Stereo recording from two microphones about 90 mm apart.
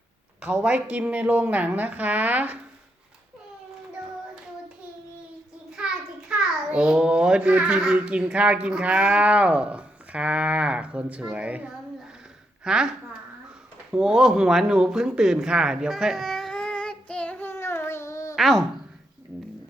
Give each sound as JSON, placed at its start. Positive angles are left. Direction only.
{"t": 0.4, "sound": "a woman's voice", "side_deg": -15}
{"t": 5.7, "sound": "a child's voice", "side_deg": -10}
{"t": 13.9, "sound": "a sound", "side_deg": -5}
{"t": 18.3, "sound": "speech", "side_deg": 0}